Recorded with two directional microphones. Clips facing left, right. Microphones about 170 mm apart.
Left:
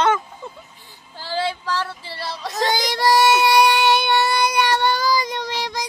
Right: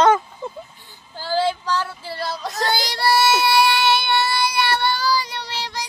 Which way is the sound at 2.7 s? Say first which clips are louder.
Left 2 dB; 20° left (ahead or behind).